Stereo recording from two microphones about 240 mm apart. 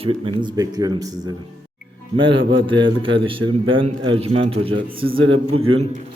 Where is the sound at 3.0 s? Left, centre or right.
Right.